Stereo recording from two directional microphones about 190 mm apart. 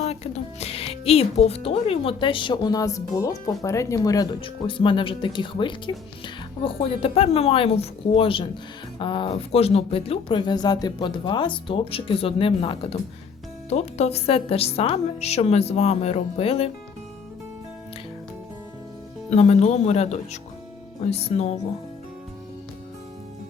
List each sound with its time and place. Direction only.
0.6 s a woman's voice: 30° left (ahead or behind)
19.3 s a woman's voice: 35° left (ahead or behind)